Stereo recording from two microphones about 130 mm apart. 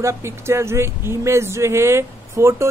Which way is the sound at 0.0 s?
20° right (ahead or behind).